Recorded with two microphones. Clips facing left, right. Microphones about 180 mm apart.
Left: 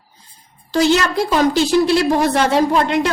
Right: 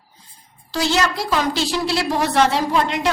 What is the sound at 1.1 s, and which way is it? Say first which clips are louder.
A woman's voice: left 6 dB; 55° left (ahead or behind).